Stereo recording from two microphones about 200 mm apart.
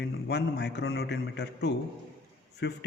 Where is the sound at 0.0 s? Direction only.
55° left (ahead or behind).